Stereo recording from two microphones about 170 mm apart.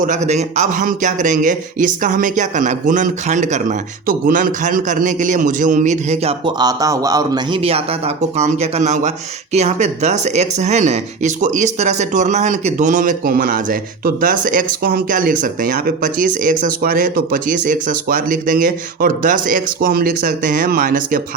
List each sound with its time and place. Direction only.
0.0 s speech: 45° right (ahead or behind)
6.4 s speech: 25° right (ahead or behind); by 21.2 s 55° right (ahead or behind)